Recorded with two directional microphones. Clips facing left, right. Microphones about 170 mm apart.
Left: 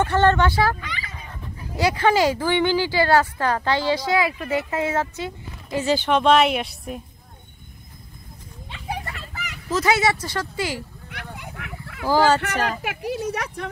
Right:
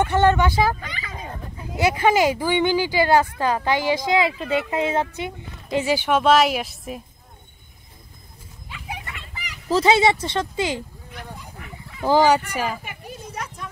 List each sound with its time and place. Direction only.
0.0 s speech: 15° right (ahead or behind)
0.7 s speech: 45° right (ahead or behind)
1.8 s speech: 15° right (ahead or behind)
8.6 s children playing: 30° left (ahead or behind)
9.7 s speech: 30° right (ahead or behind)
11.3 s bow-wow: 75° left (ahead or behind)
12.0 s speech: 20° right (ahead or behind)
12.8 s speech: 80° left